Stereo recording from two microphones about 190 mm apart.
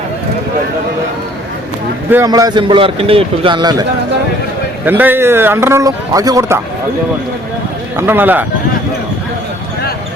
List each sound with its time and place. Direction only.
2.0 s a man's voice: 15° right (ahead or behind)
4.9 s a man's voice: 10° right (ahead or behind)
7.9 s a man's voice: 10° right (ahead or behind)